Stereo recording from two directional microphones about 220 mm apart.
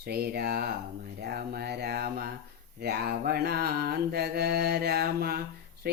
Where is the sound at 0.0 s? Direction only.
45° right (ahead or behind).